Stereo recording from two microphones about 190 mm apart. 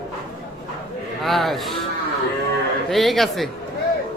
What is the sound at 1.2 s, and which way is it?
Speech, centre (ahead or behind).